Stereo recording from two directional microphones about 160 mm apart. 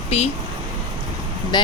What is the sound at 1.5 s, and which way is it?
Speech, 25° left (ahead or behind).